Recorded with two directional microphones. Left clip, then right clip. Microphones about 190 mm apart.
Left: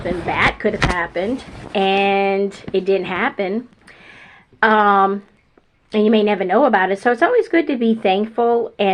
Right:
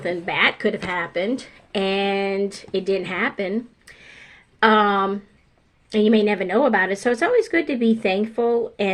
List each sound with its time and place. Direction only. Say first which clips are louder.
0.0 s a woman's voice: left 2 dB; 25° right (ahead or behind)